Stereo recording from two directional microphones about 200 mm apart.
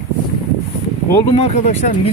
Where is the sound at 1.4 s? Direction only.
35° left (ahead or behind).